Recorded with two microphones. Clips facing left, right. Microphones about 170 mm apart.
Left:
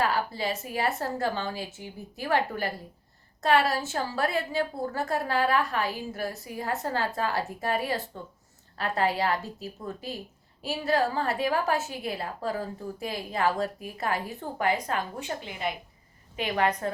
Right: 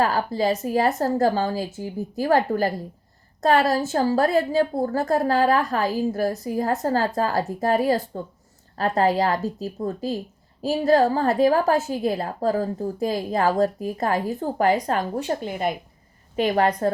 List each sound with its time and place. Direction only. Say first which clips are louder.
0.0 s a woman's voice: right 6 dB; 40° right (ahead or behind)